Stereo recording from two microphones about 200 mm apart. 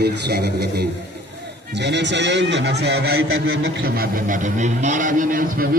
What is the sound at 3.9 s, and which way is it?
A man's voice, 45° right (ahead or behind).